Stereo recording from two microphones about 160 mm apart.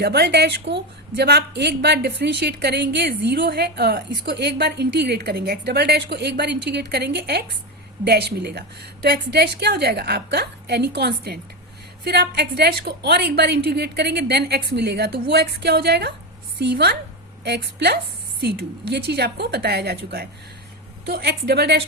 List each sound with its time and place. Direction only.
0.0 s a woman's voice: 90° right